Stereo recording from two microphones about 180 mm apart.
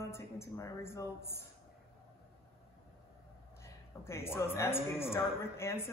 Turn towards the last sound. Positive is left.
turn(degrees=15)  # may be behind; listen again after turning